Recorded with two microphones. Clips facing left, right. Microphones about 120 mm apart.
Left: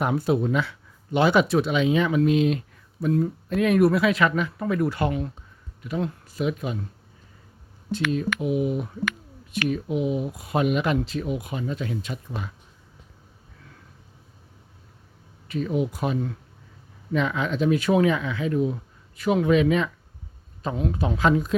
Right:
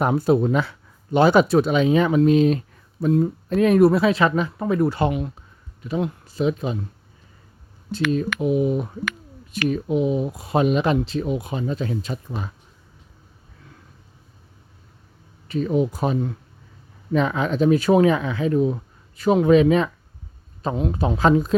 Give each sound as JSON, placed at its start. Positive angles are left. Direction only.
{"t": 0.0, "sound": "speech", "side_deg": -40}
{"t": 7.9, "sound": "speech", "side_deg": -35}
{"t": 15.4, "sound": "a man's voice", "side_deg": -35}